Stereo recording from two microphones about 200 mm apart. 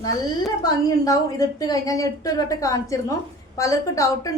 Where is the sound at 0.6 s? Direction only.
20° left (ahead or behind).